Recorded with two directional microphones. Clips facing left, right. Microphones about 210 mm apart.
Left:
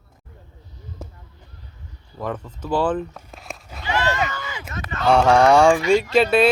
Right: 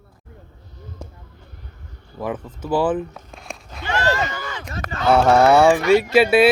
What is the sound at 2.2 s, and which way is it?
Speech, 10° right (ahead or behind).